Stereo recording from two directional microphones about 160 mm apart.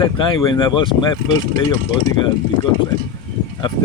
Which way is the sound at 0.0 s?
30° left (ahead or behind).